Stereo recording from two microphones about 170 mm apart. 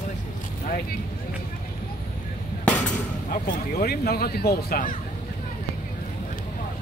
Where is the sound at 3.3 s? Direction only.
60° left (ahead or behind).